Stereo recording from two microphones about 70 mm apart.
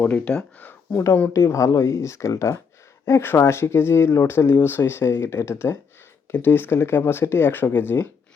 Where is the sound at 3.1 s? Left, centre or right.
Left.